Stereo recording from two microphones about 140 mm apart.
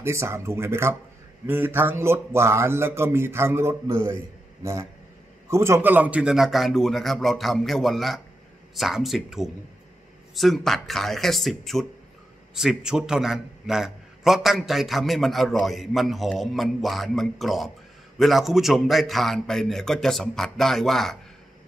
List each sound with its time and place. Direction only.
0.0 s speech: 20° right (ahead or behind)
5.5 s a man's voice: 20° right (ahead or behind); by 21.2 s centre (ahead or behind)